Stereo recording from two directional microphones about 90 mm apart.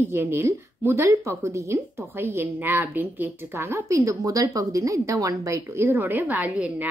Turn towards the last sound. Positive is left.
turn(degrees=-15)  # may be behind; listen again after turning